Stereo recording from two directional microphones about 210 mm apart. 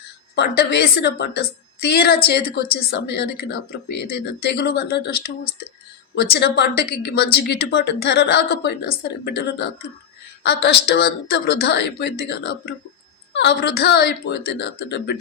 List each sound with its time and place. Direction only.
0.3 s a woman's voice: 50° left (ahead or behind)
6.3 s a woman's voice: 50° left (ahead or behind)